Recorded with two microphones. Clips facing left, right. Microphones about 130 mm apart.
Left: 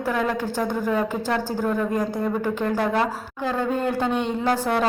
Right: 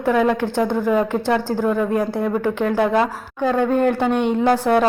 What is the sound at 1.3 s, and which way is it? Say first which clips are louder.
Speech: right 5 dB; 10° right (ahead or behind).